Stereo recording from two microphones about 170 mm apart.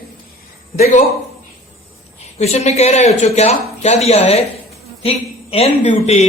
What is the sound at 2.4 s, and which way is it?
A man's voice, 40° left (ahead or behind).